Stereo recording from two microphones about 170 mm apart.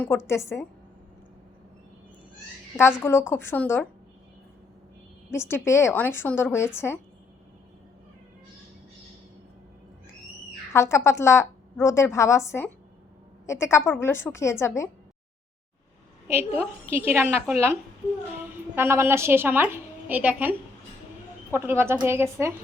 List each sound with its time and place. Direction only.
0.3 s a woman's voice: 15° left (ahead or behind)
2.7 s a woman's voice: 15° left (ahead or behind)
5.3 s a woman's voice: 15° left (ahead or behind)
10.7 s a woman's voice: 15° left (ahead or behind)
16.9 s a woman's voice: 15° right (ahead or behind)
18.8 s a woman's voice: 15° right (ahead or behind)